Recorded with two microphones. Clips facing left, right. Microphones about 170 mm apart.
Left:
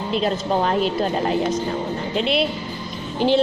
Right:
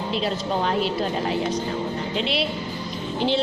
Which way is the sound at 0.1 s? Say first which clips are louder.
Left 5 dB; 50° left (ahead or behind).